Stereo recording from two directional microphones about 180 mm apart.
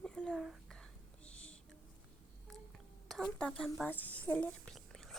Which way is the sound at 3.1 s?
Centre (ahead or behind).